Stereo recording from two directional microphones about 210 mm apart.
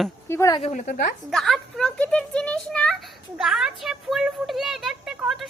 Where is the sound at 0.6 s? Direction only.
35° left (ahead or behind).